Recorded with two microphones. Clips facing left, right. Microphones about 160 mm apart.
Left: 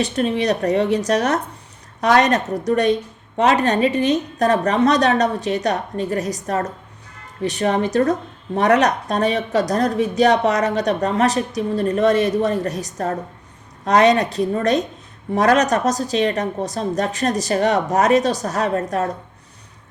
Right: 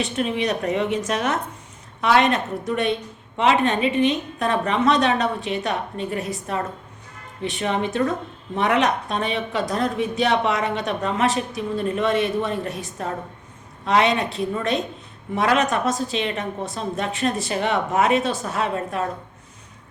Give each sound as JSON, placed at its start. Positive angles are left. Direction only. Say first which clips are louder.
{"t": 0.0, "sound": "a woman's voice", "louder": "left 4 dB", "side_deg": 35}